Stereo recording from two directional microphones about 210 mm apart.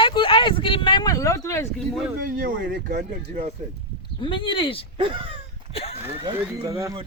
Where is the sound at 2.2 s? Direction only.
40° right (ahead or behind).